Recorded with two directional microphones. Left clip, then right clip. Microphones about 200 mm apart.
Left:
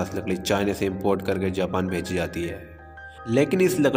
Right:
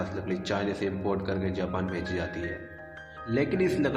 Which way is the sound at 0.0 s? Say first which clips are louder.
Left 5 dB; 45° left (ahead or behind).